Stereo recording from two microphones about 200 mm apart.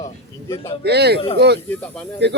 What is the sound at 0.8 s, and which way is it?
Speech, 55° right (ahead or behind).